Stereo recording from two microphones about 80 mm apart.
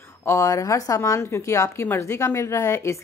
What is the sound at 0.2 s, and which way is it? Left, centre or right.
A woman's voice, left.